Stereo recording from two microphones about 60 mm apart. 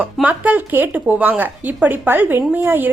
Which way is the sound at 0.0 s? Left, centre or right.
Right.